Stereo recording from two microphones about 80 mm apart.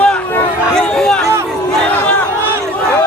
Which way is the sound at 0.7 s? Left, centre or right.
Centre.